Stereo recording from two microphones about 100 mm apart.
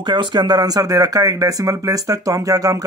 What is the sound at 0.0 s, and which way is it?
Speech, 50° right (ahead or behind).